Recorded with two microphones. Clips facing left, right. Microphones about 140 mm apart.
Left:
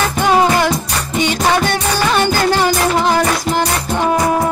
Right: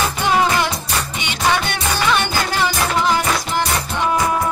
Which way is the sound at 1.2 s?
40° left (ahead or behind).